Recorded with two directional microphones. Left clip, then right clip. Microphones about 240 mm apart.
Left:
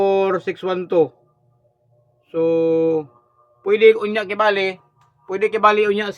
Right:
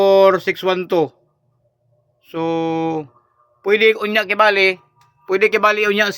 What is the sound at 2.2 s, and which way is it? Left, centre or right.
A man's voice, centre.